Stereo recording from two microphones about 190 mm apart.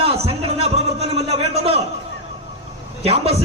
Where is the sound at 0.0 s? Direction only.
30° right (ahead or behind).